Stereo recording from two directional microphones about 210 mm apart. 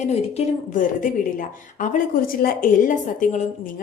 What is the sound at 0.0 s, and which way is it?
A woman's voice, 30° left (ahead or behind).